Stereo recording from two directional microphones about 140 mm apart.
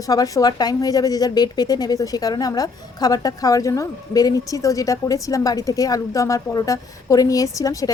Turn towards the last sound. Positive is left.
turn(degrees=25)  # may be behind; listen again after turning